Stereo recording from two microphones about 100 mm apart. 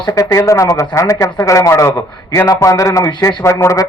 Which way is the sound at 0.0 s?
35° left (ahead or behind).